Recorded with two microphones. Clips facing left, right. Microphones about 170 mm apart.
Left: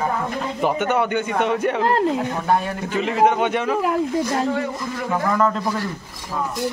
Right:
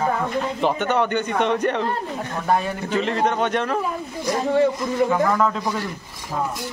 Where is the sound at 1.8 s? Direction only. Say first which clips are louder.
Left 7 dB; 85° left.